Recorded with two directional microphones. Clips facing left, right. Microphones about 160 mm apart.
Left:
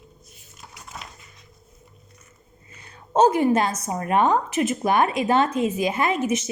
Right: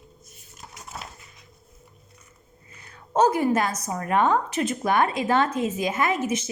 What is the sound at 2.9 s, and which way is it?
A woman's voice, 25° left (ahead or behind).